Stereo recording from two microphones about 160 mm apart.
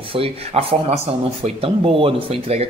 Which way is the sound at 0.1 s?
35° right (ahead or behind).